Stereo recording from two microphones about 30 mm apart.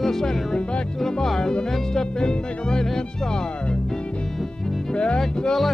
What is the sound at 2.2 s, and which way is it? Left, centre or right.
Speech, left.